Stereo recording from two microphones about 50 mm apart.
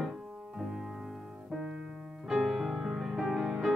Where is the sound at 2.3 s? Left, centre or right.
Centre.